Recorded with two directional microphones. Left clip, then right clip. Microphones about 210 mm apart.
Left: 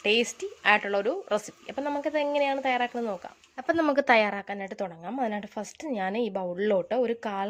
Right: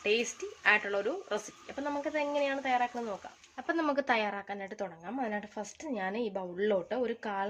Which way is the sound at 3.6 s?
25° left (ahead or behind).